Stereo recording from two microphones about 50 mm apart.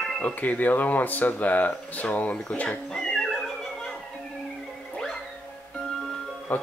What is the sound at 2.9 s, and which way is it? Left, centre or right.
Music, centre.